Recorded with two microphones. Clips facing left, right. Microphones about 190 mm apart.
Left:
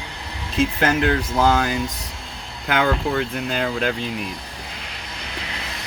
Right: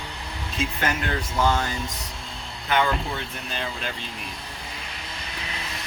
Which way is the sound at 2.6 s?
75° left (ahead or behind).